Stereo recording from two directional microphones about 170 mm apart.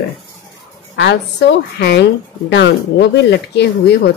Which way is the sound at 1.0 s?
85° left.